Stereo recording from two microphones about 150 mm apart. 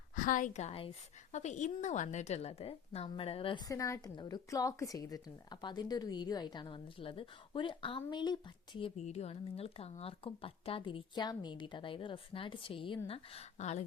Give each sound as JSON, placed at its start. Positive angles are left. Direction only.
{"t": 0.2, "sound": "a woman's voice", "side_deg": 60}
{"t": 9.0, "sound": "a woman's voice", "side_deg": 45}